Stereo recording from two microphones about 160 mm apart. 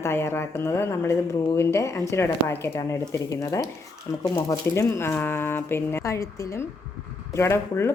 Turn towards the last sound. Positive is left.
turn(degrees=15)  # may be behind; listen again after turning